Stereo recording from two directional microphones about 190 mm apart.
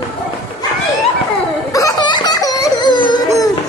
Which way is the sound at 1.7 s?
15° left (ahead or behind).